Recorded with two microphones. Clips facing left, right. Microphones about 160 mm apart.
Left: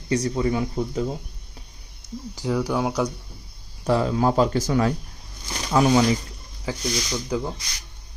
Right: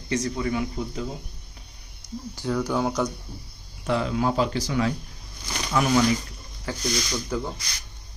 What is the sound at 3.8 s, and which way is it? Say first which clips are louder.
Speech: left 3 dB; 35° left (ahead or behind).